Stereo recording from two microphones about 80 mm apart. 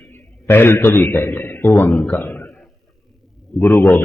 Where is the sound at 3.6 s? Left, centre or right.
Left.